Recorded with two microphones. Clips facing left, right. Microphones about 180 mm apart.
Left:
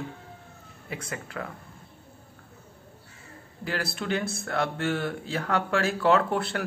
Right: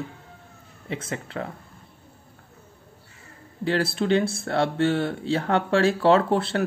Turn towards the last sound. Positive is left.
turn(degrees=-30)  # may be behind; listen again after turning